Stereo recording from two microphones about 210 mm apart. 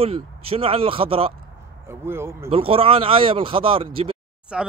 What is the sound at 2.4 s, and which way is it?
Speech, 25° right (ahead or behind).